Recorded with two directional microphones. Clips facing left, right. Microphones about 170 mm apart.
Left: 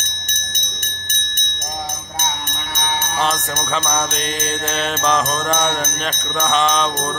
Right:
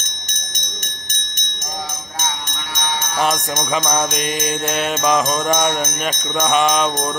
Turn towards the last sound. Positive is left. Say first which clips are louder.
# right 1 dB
turn(degrees=-10)  # may be behind; listen again after turning